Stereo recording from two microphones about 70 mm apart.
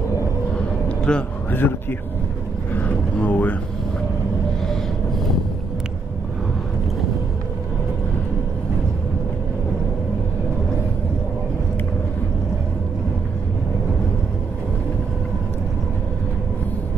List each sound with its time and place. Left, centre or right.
0.8 s a sound: centre
1.5 s speech: left
2.7 s vehicle: left